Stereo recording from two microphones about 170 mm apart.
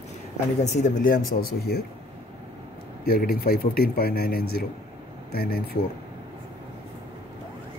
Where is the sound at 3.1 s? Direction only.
60° left (ahead or behind).